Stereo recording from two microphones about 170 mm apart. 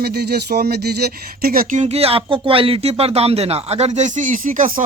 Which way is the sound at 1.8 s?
35° right (ahead or behind).